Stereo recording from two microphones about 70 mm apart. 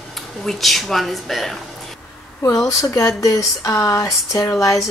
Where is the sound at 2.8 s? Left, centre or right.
Left.